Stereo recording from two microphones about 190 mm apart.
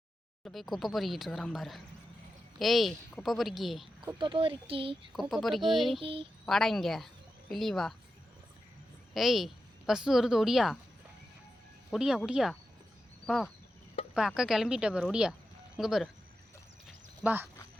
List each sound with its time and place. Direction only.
0.4 s speech: centre (ahead or behind)
4.0 s speech: 20° right (ahead or behind)
5.1 s speech: centre (ahead or behind)
6.0 s speech: 30° right (ahead or behind)
6.4 s speech: centre (ahead or behind)
9.1 s a woman's voice: centre (ahead or behind)
11.9 s speech: 5° right (ahead or behind)
17.2 s speech: 10° right (ahead or behind)